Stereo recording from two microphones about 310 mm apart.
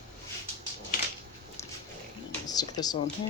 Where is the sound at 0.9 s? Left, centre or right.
Left.